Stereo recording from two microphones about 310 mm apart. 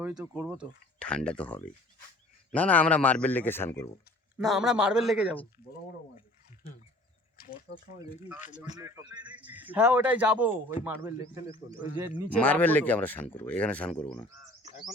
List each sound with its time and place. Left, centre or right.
0.0 s speech: centre
7.3 s speech: left
8.8 s speech: centre
12.4 s speech: centre